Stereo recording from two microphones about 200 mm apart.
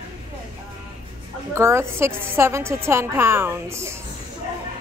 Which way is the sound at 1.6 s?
15° right (ahead or behind).